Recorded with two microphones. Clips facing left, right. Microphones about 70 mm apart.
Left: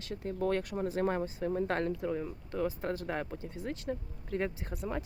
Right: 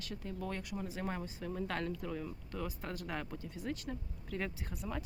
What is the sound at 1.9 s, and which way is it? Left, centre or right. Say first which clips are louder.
Speech: left 6 dB; left.